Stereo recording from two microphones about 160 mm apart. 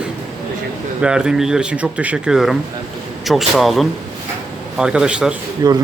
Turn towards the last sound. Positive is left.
turn(degrees=-25)  # may be behind; listen again after turning